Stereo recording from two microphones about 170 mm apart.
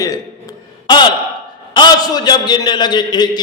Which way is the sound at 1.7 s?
25° left (ahead or behind).